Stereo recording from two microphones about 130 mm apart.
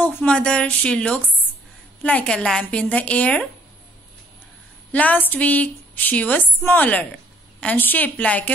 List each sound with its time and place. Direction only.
0.0 s a woman's voice: 10° left (ahead or behind)
4.9 s a woman's voice: 10° left (ahead or behind)